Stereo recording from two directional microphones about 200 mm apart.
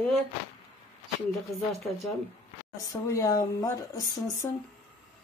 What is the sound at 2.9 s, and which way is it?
Speech, 15° left (ahead or behind).